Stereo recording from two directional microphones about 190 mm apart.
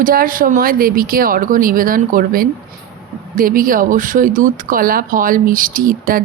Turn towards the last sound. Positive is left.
turn(degrees=-45)  # may be behind; listen again after turning